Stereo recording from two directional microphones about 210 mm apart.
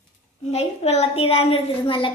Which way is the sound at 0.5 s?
30° left (ahead or behind).